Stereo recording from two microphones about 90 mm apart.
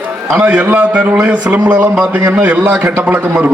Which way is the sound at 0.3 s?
15° right (ahead or behind).